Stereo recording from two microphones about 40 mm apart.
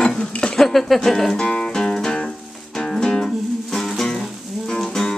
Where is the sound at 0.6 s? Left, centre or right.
Centre.